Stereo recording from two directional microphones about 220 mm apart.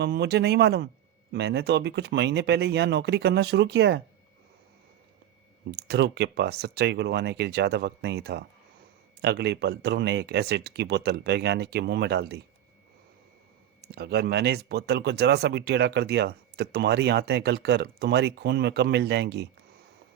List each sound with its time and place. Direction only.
0.0 s speech: 50° right (ahead or behind)
5.9 s speech: 50° right (ahead or behind)
13.8 s speech: 45° right (ahead or behind)